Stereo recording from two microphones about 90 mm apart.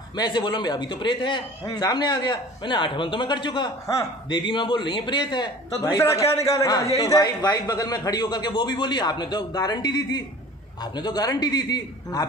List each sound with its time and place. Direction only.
0.1 s a man's voice: 55° left (ahead or behind)
3.8 s a man's voice: 35° left (ahead or behind)
4.3 s a man's voice: 60° left (ahead or behind)
5.9 s a man's voice: 35° left (ahead or behind)